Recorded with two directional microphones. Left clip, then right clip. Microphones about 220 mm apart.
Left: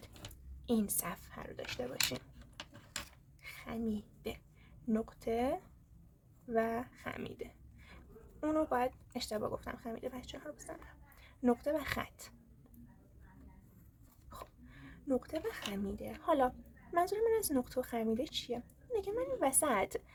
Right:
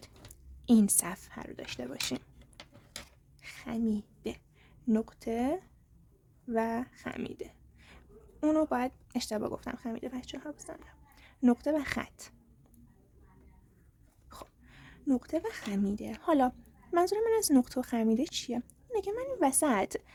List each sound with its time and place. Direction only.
0.6 s speech: 45° right (ahead or behind)
3.4 s a sound: 45° right (ahead or behind)
4.9 s speech: 35° right (ahead or behind)
14.3 s speech: 40° right (ahead or behind)